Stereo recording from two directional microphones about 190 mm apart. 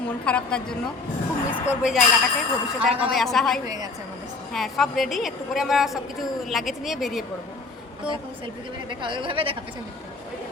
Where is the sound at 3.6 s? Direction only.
20° right (ahead or behind).